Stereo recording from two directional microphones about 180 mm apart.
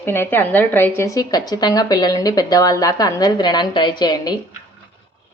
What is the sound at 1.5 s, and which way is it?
Speech, 20° left (ahead or behind).